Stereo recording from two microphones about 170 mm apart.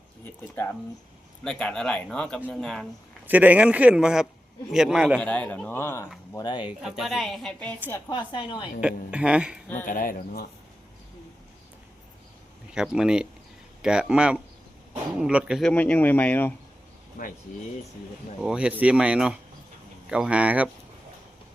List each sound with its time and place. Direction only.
1.5 s a woman's voice: 5° left (ahead or behind)
3.2 s a woman's voice: 10° right (ahead or behind)
5.2 s a woman's voice: 10° left (ahead or behind); by 6.6 s 25° left (ahead or behind)
6.6 s a woman's voice: 5° right (ahead or behind)
8.1 s a woman's voice: 30° left (ahead or behind)
8.8 s speech: 5° right (ahead or behind)
9.8 s speech: 55° left (ahead or behind)
12.7 s a woman's voice: 5° right (ahead or behind)
15.7 s speech: 10° left (ahead or behind)
17.2 s speech: 55° left (ahead or behind)
18.3 s speech: 5° right (ahead or behind)